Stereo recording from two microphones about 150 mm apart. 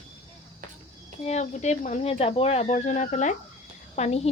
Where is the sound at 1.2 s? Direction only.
50° left (ahead or behind).